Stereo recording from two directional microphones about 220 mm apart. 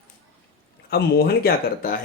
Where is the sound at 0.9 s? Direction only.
45° left (ahead or behind).